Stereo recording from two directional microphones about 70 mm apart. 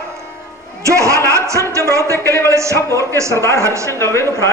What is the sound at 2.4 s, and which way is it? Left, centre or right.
A man's voice, right.